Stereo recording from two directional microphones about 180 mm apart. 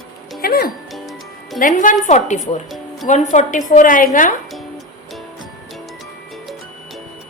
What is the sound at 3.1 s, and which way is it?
A woman's voice, 45° left (ahead or behind).